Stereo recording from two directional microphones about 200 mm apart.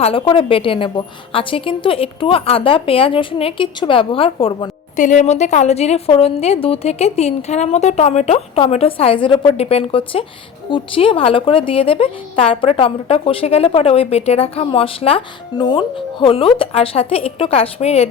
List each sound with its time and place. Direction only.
0.0 s a woman's voice: 25° left (ahead or behind)
4.9 s a woman's voice: 40° left (ahead or behind)